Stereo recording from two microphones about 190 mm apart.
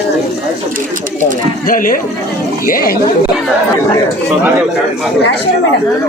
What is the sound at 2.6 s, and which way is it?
Speech, 50° left (ahead or behind).